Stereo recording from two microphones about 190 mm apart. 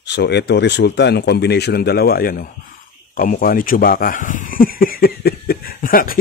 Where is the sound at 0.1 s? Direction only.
60° left (ahead or behind).